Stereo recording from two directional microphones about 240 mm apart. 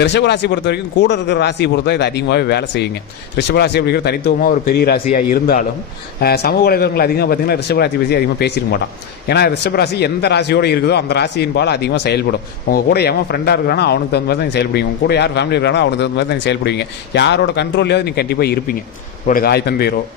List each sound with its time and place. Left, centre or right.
0.0 s a man's voice: left